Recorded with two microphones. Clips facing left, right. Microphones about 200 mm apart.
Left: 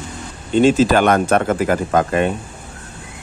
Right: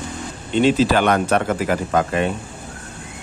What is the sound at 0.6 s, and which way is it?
Speech, 45° left (ahead or behind).